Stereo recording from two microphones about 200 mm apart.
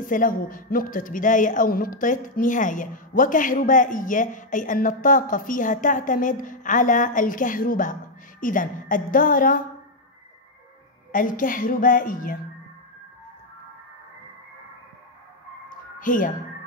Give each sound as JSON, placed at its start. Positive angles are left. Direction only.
{"t": 0.0, "sound": "a woman's voice", "side_deg": 40}
{"t": 11.1, "sound": "a woman's voice", "side_deg": 45}
{"t": 15.7, "sound": "a sound", "side_deg": 40}